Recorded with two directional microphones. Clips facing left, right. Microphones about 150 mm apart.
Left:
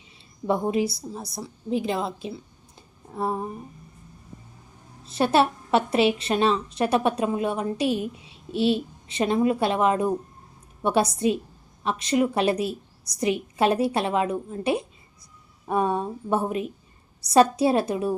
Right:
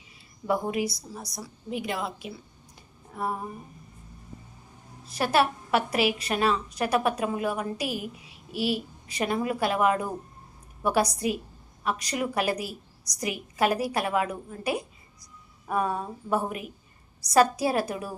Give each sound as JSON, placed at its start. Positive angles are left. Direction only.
{"t": 0.4, "sound": "a woman's voice", "side_deg": 25}
{"t": 5.0, "sound": "a woman's voice", "side_deg": 25}